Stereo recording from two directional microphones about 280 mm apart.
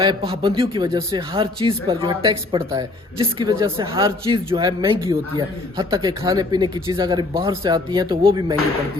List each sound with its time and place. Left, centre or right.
0.0 s a man's voice: centre